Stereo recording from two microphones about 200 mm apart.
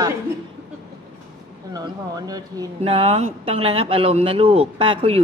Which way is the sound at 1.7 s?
20° right (ahead or behind).